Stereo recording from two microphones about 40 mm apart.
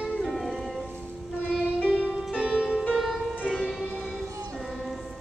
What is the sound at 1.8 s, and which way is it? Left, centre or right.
Music, right.